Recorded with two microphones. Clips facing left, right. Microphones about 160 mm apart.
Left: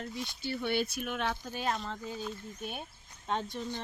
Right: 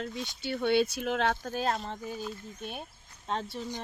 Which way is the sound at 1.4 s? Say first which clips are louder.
Right 3 dB; 45° right (ahead or behind).